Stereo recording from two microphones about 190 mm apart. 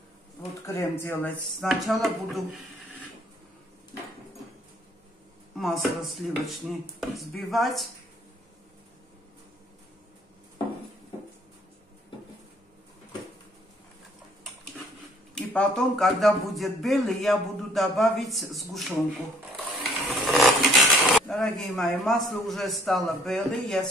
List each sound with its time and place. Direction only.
0.7 s a man's voice: 15° left (ahead or behind); by 2.6 s centre (ahead or behind)
5.6 s a man's voice: centre (ahead or behind)
15.3 s a man's voice: 5° left (ahead or behind)